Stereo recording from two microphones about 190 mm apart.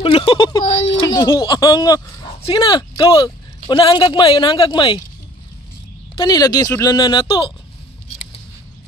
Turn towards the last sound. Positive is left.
turn(degrees=25)  # may be behind; listen again after turning